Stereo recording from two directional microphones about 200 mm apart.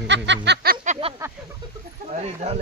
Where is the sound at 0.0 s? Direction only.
60° right (ahead or behind).